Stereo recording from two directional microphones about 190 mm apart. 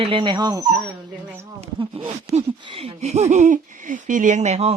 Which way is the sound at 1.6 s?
30° right (ahead or behind).